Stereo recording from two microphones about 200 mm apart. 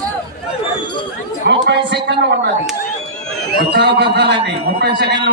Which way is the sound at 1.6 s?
55° right (ahead or behind).